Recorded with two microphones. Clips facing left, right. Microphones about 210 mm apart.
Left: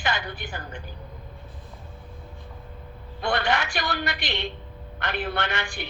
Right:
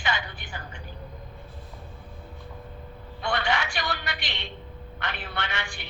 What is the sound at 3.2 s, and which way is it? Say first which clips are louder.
A woman's voice: left 3 dB; 55° left (ahead or behind).